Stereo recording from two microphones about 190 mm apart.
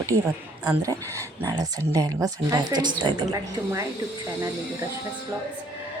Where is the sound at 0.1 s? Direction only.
35° right (ahead or behind).